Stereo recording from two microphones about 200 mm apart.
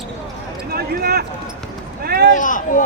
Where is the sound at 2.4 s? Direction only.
40° left (ahead or behind).